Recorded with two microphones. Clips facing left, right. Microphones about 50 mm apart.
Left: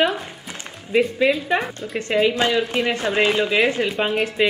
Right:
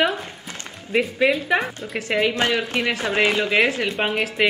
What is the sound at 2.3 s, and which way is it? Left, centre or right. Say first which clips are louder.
Speech: left 2 dB; right.